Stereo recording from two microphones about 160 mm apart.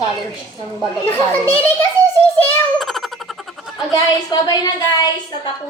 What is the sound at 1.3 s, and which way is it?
Speech, 10° left (ahead or behind).